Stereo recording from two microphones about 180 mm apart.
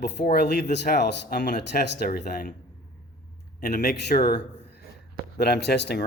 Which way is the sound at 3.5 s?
50° left (ahead or behind).